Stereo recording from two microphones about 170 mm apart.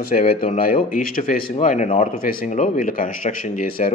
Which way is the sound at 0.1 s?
45° left (ahead or behind).